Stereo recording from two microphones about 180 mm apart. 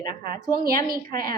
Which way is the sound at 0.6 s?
55° right (ahead or behind).